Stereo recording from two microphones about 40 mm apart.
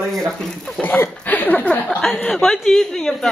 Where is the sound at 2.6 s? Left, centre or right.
Centre.